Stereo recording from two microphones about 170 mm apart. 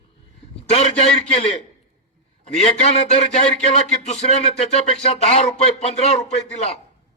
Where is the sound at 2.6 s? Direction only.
40° left (ahead or behind).